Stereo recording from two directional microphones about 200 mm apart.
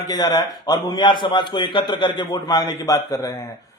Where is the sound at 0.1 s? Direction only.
20° left (ahead or behind).